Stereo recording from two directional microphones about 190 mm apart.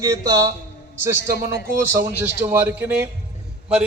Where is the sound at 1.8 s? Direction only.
10° right (ahead or behind).